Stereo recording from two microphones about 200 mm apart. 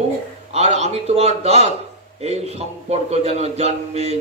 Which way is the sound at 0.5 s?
30° right (ahead or behind).